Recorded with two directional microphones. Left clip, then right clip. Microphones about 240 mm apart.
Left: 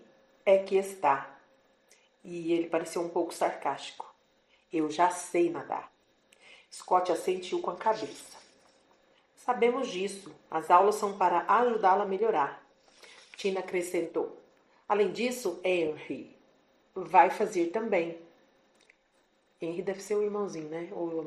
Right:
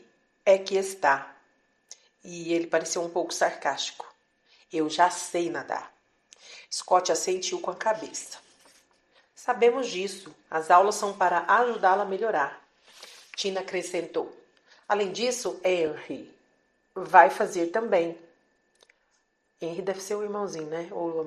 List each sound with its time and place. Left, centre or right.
0.4 s a woman's voice: right
2.5 s speech: right
4.7 s a woman's voice: right
6.8 s speech: right
9.5 s a woman's voice: right
16.9 s a woman's voice: right
19.5 s a woman's voice: centre